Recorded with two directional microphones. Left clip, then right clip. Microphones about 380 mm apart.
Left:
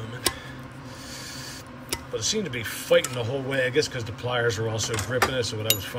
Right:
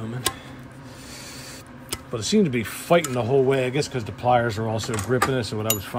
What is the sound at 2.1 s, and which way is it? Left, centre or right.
Cutlery, centre.